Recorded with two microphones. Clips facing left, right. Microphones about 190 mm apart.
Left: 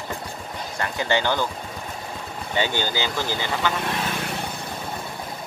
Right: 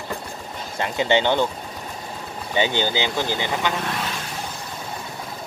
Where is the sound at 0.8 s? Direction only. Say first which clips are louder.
Right 4 dB; 20° right (ahead or behind).